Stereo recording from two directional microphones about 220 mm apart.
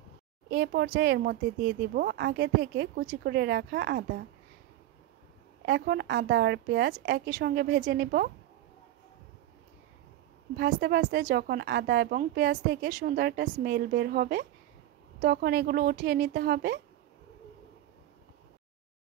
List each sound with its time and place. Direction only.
0.5 s a woman's voice: 50° right (ahead or behind)
5.7 s a woman's voice: 50° right (ahead or behind)
10.6 s a woman's voice: 45° right (ahead or behind)